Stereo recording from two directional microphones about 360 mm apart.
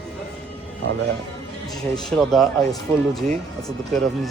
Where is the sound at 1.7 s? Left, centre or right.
Centre.